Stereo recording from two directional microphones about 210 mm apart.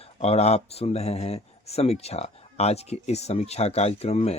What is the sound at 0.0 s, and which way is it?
Speech, 30° left (ahead or behind).